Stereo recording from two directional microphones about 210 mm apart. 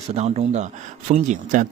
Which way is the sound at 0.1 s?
30° right (ahead or behind).